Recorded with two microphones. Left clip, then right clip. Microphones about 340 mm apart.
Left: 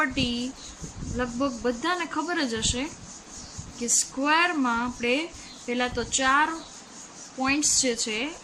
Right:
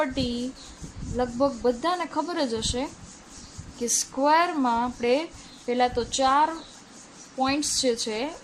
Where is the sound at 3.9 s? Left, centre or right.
Centre.